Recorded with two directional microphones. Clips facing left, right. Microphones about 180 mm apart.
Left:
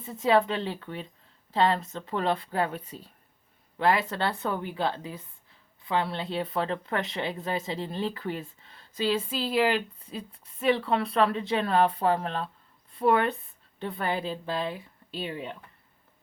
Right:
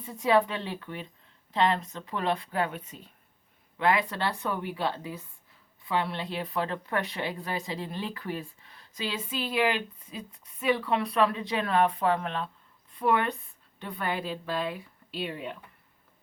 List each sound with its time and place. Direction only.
0.0 s speech: 25° left (ahead or behind)